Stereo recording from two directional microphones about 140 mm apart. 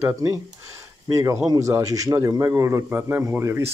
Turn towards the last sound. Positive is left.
turn(degrees=-20)  # may be behind; listen again after turning